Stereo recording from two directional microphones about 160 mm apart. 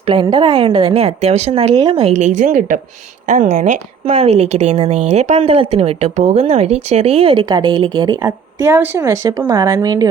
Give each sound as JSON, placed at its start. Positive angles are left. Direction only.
{"t": 0.1, "sound": "a woman's voice", "side_deg": -30}